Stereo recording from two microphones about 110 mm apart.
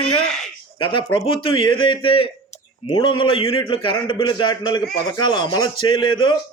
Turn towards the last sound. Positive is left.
turn(degrees=45)  # may be behind; listen again after turning